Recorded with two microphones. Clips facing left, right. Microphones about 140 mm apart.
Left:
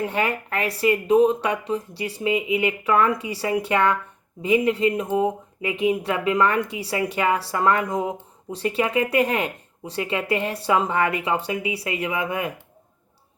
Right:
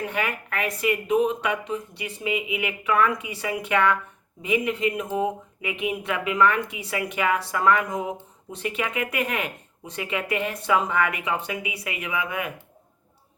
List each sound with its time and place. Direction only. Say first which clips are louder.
0.0 s speech: left 4 dB; 30° left (ahead or behind)